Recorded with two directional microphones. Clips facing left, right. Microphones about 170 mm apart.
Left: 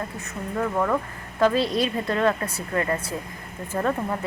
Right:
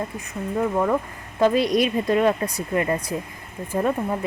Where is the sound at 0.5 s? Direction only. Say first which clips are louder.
Right 2 dB; 15° right (ahead or behind).